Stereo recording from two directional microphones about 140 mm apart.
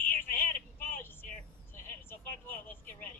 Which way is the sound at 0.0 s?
15° left (ahead or behind).